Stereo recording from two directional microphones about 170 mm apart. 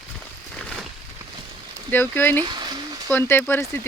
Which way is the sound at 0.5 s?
5° left (ahead or behind).